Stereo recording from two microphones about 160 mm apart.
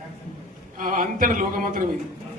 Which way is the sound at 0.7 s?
60° right (ahead or behind).